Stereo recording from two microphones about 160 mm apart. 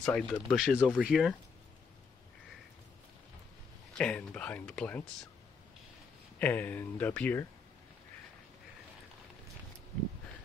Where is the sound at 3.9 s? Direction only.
5° left (ahead or behind).